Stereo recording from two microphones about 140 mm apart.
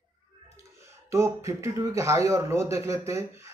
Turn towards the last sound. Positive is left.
turn(degrees=-20)  # may be behind; listen again after turning